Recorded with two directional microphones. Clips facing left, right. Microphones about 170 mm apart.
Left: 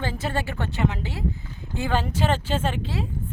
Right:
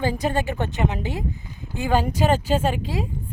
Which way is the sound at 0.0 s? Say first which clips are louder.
Right 5 dB; 15° right (ahead or behind).